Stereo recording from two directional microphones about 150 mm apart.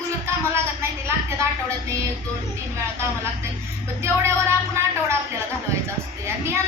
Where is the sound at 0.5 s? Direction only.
15° right (ahead or behind).